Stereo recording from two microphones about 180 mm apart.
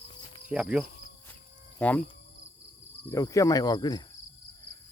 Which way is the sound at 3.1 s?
20° left (ahead or behind).